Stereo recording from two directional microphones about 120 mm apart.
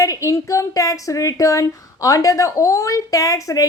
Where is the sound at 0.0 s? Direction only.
25° left (ahead or behind).